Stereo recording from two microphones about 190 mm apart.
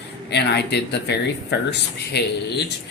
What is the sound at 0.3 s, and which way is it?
Speech, 65° left (ahead or behind).